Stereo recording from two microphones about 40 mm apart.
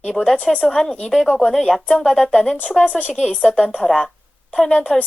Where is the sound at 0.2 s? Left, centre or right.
Centre.